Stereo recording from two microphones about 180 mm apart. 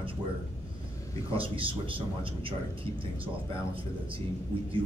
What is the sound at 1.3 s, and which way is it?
A man's voice, 30° right (ahead or behind).